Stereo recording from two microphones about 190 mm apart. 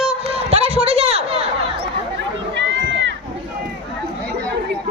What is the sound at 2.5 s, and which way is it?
Run, 70° right (ahead or behind).